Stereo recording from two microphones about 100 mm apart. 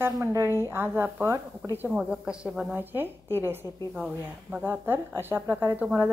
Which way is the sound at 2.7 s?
20° right (ahead or behind).